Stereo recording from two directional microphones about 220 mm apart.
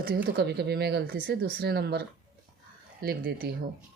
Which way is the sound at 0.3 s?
50° right (ahead or behind).